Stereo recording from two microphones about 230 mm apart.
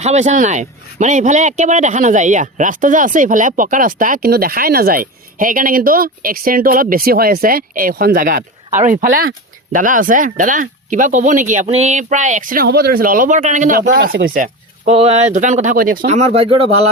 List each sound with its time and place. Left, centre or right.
0.0 s speech: right
14.3 s speech: right